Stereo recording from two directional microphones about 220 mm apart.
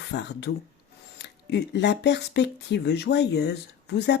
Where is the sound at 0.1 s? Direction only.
50° left (ahead or behind).